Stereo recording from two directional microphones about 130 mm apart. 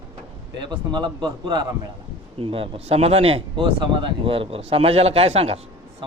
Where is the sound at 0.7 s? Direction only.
35° right (ahead or behind); by 5.5 s 50° right (ahead or behind).